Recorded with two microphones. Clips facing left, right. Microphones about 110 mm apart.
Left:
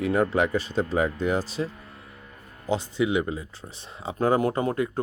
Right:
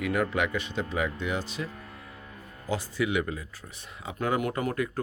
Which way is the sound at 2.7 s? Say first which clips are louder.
Left 4 dB; 25° left (ahead or behind).